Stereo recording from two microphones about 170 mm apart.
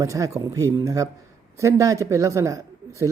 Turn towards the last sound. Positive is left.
turn(degrees=-20)  # may be behind; listen again after turning